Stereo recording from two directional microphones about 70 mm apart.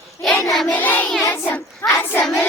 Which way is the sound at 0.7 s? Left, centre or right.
Left.